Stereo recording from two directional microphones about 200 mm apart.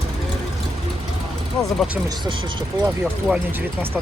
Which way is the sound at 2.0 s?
20° right (ahead or behind).